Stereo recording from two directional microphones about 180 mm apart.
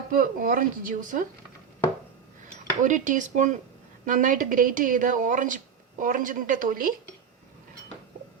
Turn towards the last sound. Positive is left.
turn(degrees=-50)  # may be behind; listen again after turning